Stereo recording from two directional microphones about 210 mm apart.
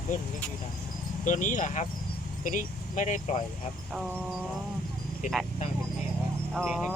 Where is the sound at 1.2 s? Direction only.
35° left (ahead or behind).